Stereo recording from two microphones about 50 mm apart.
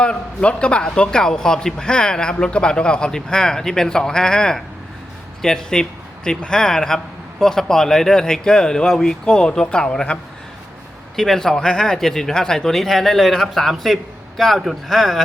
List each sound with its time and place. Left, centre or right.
0.0 s a man's voice: left
11.2 s a man's voice: centre